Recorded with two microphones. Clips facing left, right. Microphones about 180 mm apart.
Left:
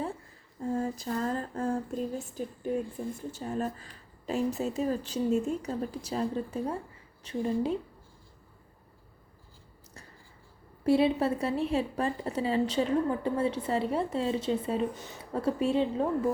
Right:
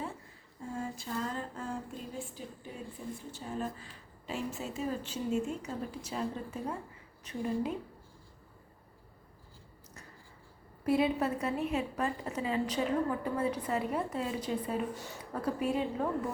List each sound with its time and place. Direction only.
0.7 s a sound: 40° left (ahead or behind)
4.3 s a woman's voice: 40° left (ahead or behind)
10.8 s a woman's voice: 30° left (ahead or behind)